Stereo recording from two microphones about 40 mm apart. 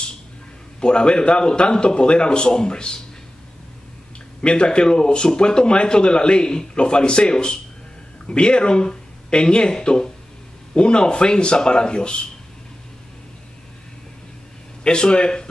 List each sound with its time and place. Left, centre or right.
0.7 s speech: left
4.4 s speech: left
14.8 s speech: left